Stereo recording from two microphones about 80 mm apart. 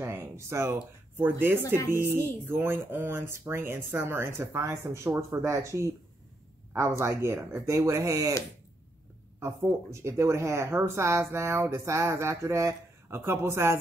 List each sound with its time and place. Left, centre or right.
0.0 s speech: right
9.4 s speech: right